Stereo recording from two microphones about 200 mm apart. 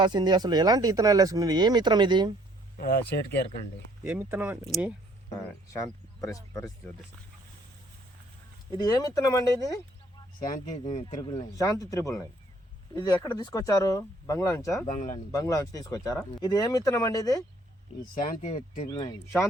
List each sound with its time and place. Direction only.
0.0 s speech: 20° right (ahead or behind)
2.7 s speech: 50° left (ahead or behind)
4.0 s speech: 5° right (ahead or behind)
6.2 s speech: 15° left (ahead or behind)
8.8 s speech: 20° left (ahead or behind)
10.5 s speech: 35° left (ahead or behind)
11.0 s speech: 20° left (ahead or behind)
14.9 s speech: 40° left (ahead or behind)
15.3 s speech: 15° left (ahead or behind)
18.0 s speech: 45° left (ahead or behind)
18.9 s speech: 20° left (ahead or behind)